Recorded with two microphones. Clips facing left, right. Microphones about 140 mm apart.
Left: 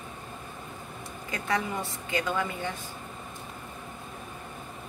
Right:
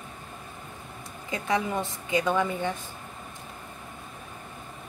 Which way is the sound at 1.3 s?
20° right (ahead or behind).